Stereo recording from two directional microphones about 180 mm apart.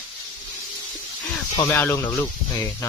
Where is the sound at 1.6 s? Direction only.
15° left (ahead or behind).